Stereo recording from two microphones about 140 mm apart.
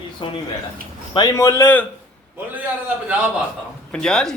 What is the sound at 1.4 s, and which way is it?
Speech, 20° left (ahead or behind).